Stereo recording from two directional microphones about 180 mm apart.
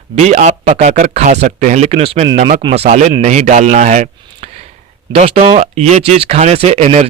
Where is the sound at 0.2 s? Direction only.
40° right (ahead or behind).